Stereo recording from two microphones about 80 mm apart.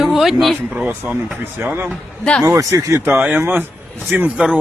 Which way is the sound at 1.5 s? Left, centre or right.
Right.